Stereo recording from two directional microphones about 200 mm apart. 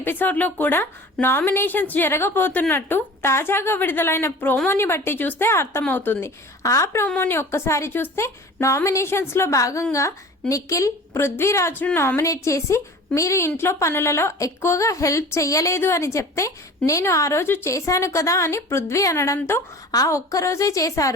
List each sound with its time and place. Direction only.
0.0 s a woman's voice: 10° left (ahead or behind)